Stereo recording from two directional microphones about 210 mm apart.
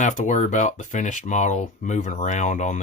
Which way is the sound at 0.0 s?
35° left (ahead or behind).